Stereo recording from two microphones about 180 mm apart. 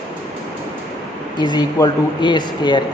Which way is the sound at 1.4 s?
25° left (ahead or behind).